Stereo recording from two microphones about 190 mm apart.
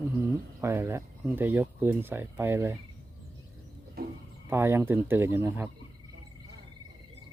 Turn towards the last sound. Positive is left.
turn(degrees=-15)  # may be behind; listen again after turning